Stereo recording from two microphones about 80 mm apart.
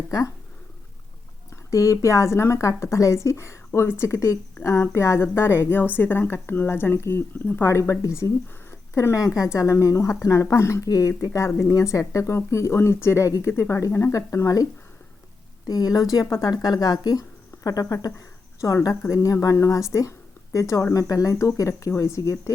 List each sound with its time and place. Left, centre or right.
1.7 s speech: left
11.3 s speech: left
19.0 s speech: left